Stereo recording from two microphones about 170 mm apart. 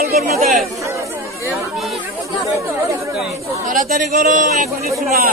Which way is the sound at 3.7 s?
50° right (ahead or behind).